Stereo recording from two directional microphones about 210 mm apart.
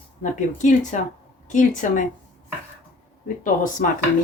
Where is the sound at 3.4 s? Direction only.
40° left (ahead or behind).